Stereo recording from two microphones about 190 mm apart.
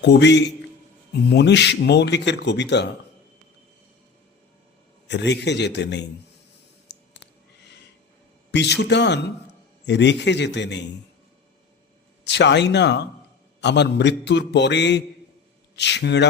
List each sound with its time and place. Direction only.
0.0 s speech: 65° left (ahead or behind)
5.0 s speech: 65° left (ahead or behind)
6.9 s clicking: 65° left (ahead or behind)
8.5 s a man's voice: 65° left (ahead or behind)
12.2 s speech: 65° left (ahead or behind)